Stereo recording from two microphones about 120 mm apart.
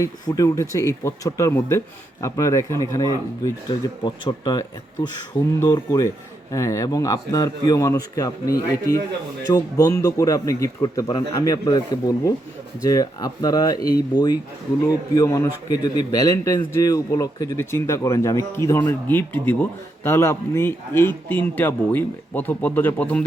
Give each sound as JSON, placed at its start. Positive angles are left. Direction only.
{"t": 0.0, "sound": "a man's voice", "side_deg": 30}